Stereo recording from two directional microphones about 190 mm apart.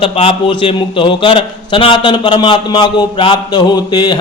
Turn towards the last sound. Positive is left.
turn(degrees=20)  # may be behind; listen again after turning